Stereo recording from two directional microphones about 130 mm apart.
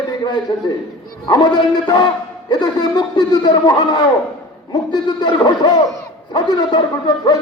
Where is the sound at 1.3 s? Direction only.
35° left (ahead or behind).